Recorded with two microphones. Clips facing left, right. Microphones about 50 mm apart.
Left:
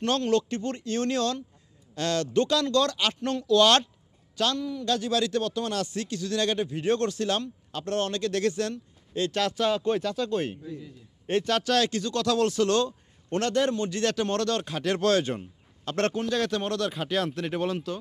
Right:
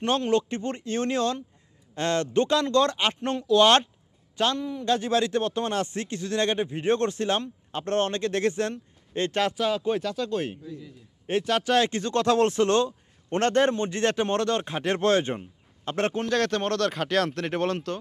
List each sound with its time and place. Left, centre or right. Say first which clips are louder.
0.0 s a man's voice: right 1 dB; right
9.6 s a man's voice: even; centre; by 15.4 s right
16.1 s speech: right 2 dB; right